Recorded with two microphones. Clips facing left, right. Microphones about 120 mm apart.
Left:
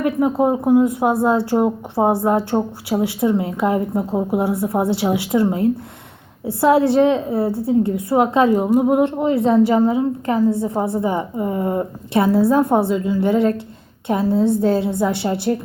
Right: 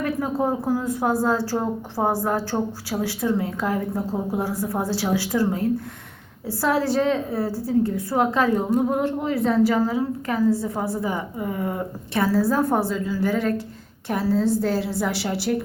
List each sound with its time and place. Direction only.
0.0 s a woman's voice: 20° left (ahead or behind)